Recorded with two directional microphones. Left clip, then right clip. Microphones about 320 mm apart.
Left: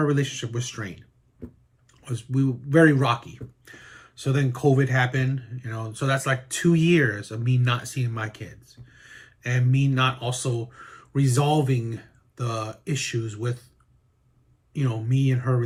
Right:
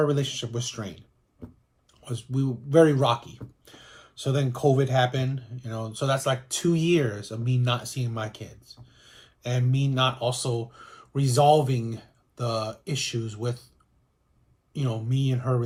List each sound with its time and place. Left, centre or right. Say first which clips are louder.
0.0 s speech: even; centre
1.9 s speech: left 2 dB; centre
14.7 s speech: left 2 dB; centre